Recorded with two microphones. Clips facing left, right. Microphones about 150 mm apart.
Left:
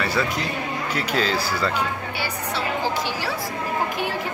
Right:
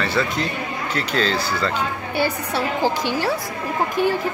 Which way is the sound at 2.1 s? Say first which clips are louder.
Right 6 dB; 50° right (ahead or behind).